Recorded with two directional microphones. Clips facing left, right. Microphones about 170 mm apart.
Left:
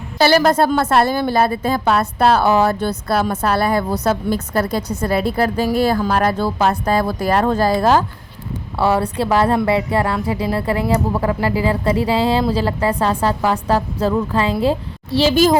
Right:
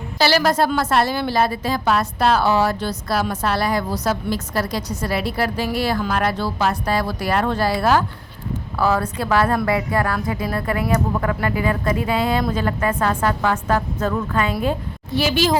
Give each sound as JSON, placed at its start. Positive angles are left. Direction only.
{"t": 0.2, "sound": "a woman's voice", "side_deg": 50}
{"t": 8.8, "sound": "a woman's voice", "side_deg": 30}